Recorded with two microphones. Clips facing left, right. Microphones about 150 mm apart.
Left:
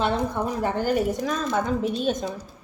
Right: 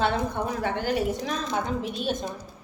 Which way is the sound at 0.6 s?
45° left (ahead or behind).